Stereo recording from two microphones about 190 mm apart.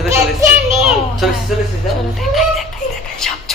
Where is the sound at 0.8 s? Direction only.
Centre (ahead or behind).